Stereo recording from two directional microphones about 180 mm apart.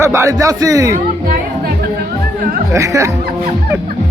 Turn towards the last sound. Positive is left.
turn(degrees=-15)  # may be behind; listen again after turning